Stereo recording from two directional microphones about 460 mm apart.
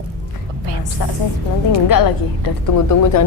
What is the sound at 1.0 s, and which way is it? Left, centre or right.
Speech, left.